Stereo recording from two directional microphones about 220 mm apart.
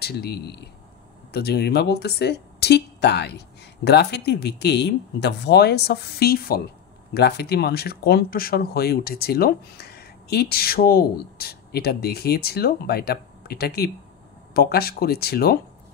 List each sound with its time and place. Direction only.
0.0 s speech: 45° left (ahead or behind)